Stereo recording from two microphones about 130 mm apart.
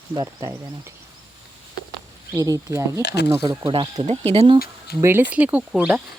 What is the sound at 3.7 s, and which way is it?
Speech, 40° right (ahead or behind).